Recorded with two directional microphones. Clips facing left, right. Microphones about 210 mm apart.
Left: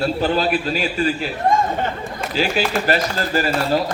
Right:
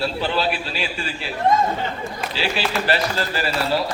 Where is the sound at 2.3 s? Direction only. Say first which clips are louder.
Left 5 dB; 45° left (ahead or behind).